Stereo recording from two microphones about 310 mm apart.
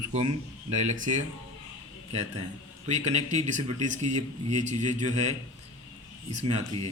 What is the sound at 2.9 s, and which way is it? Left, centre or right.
A man's voice, right.